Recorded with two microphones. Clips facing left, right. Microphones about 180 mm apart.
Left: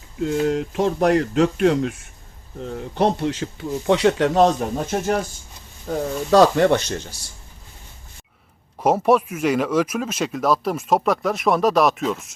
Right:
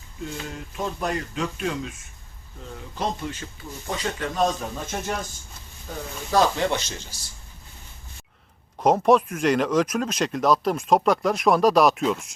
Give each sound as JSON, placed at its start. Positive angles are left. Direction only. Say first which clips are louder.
{"t": 0.2, "sound": "speech", "louder": "left 14 dB", "side_deg": 60}
{"t": 8.8, "sound": "speech", "louder": "left 1 dB", "side_deg": 5}